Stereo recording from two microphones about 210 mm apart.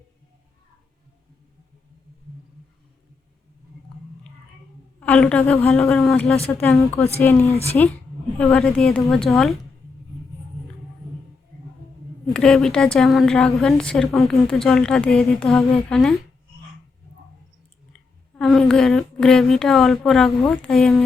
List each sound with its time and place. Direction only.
4.9 s a woman's voice: 5° left (ahead or behind)
7.5 s speech: 30° left (ahead or behind)
8.4 s a woman's voice: 5° left (ahead or behind)
12.3 s a woman's voice: 5° left (ahead or behind)
18.3 s a woman's voice: centre (ahead or behind)